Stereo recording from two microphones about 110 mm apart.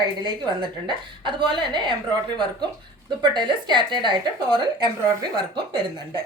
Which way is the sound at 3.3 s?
45° right (ahead or behind).